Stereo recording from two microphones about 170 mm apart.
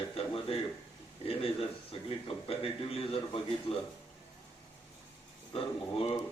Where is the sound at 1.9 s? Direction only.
35° left (ahead or behind).